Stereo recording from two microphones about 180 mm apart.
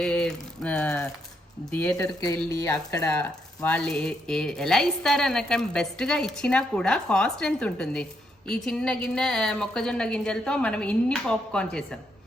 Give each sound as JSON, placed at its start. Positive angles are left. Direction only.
{"t": 0.0, "sound": "speech", "side_deg": 5}